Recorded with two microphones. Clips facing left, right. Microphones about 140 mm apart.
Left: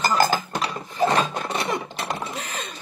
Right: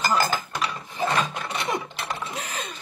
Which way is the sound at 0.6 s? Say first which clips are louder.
Left 1 dB; 40° left (ahead or behind).